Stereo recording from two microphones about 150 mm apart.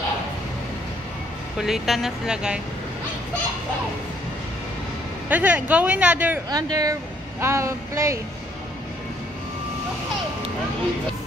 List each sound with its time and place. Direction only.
1.6 s speech: centre (ahead or behind)
5.3 s a woman's voice: 10° right (ahead or behind)
6.5 s speech: 25° right (ahead or behind)